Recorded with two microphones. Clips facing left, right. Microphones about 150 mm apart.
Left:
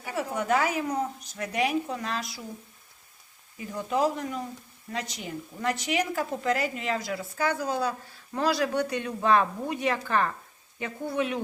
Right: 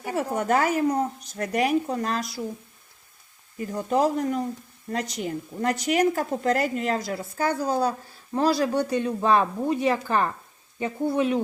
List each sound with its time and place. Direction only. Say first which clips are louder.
0.0 s speech: right 4 dB; 45° right (ahead or behind)
3.8 s a woman's voice: right 4 dB; 40° right (ahead or behind)